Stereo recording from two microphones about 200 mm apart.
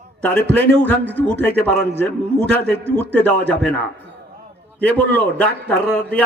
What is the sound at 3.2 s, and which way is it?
Speech, 5° left (ahead or behind).